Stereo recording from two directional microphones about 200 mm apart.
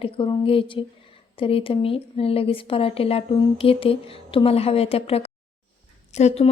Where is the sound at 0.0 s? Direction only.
25° left (ahead or behind).